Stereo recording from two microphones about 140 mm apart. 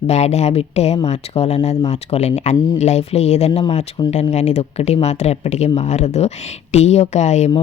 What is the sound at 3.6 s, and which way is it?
Speech, 40° left (ahead or behind).